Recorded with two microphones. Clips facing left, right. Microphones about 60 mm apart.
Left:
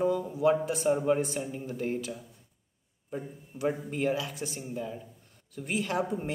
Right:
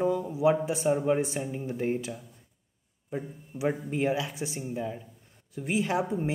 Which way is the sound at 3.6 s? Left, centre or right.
Centre.